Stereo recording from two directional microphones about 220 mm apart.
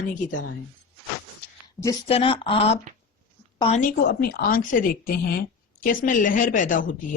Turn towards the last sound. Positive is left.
turn(degrees=35)  # may be behind; listen again after turning